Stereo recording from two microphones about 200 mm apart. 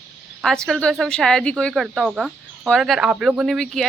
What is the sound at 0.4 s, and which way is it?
Speech, centre (ahead or behind).